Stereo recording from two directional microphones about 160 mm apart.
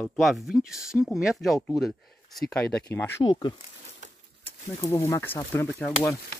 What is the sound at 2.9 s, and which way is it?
Speech, 15° left (ahead or behind).